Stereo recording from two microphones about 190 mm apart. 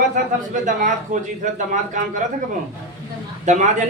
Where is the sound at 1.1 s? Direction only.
40° right (ahead or behind).